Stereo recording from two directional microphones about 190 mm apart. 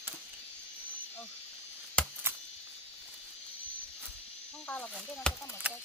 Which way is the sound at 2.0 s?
5° left (ahead or behind).